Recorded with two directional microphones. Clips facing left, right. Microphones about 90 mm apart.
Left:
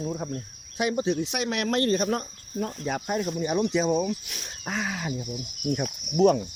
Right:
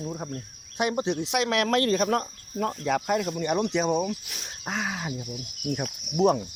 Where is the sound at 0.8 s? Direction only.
50° right (ahead or behind).